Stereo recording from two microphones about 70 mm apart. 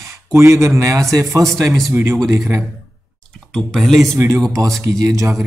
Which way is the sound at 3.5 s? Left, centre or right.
Centre.